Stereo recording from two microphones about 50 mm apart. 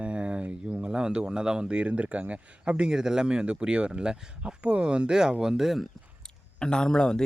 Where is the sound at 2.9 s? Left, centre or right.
Centre.